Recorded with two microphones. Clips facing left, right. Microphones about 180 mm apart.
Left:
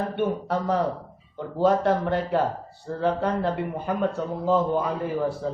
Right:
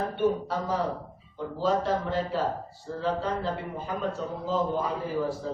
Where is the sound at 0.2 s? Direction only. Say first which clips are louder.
Even; 60° left (ahead or behind).